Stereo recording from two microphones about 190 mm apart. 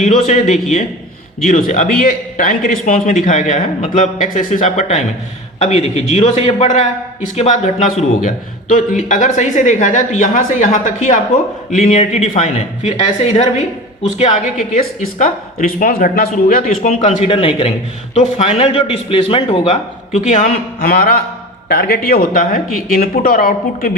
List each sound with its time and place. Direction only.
0.0 s a man's voice: 40° left (ahead or behind)